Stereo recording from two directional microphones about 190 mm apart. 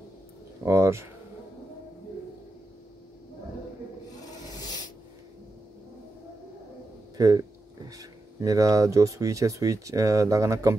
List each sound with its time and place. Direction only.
0.7 s speech: 15° right (ahead or behind)
4.2 s rub: 20° left (ahead or behind)
7.2 s speech: 20° right (ahead or behind)